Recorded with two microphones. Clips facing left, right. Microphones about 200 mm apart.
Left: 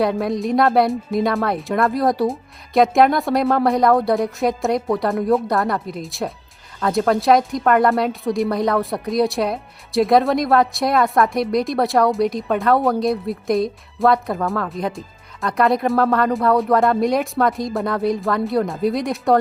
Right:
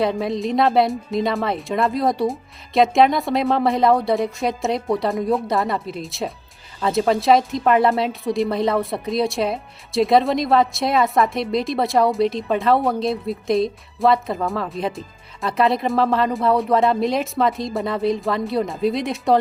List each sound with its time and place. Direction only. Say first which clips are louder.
0.0 s speech: left 1 dB; centre (ahead or behind)
12.2 s speech: even; 25° right (ahead or behind)
12.5 s speech: left 3 dB; centre (ahead or behind)